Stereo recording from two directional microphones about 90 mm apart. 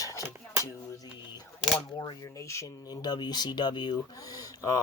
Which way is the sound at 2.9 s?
50° left (ahead or behind).